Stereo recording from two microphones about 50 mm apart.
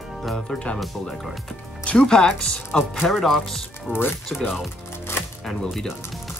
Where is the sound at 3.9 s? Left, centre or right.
Left.